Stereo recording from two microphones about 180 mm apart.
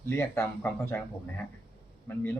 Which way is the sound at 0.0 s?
15° left (ahead or behind).